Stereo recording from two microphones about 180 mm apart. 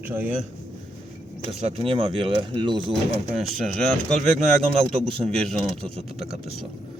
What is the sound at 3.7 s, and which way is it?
A man's voice, centre (ahead or behind).